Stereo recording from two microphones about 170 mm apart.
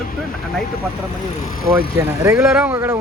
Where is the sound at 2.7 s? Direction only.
15° right (ahead or behind).